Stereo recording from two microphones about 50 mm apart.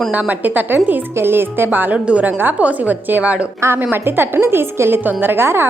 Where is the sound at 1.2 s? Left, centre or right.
Right.